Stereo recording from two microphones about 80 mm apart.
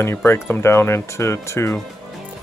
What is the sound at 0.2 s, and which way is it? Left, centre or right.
Speech, left.